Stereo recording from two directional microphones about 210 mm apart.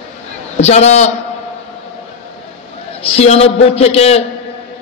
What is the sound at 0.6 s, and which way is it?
Speech, 30° left (ahead or behind).